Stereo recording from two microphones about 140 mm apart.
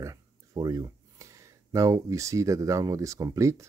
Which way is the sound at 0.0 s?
25° right (ahead or behind).